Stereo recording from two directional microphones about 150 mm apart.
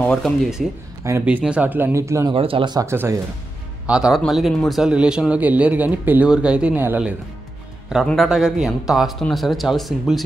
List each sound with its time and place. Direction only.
0.0 s a man's voice: 5° left (ahead or behind)
1.0 s a man's voice: 15° right (ahead or behind)
2.3 s speech: 35° right (ahead or behind); by 3.2 s 20° right (ahead or behind)
3.8 s a man's voice: 5° right (ahead or behind)
7.9 s a man's voice: centre (ahead or behind)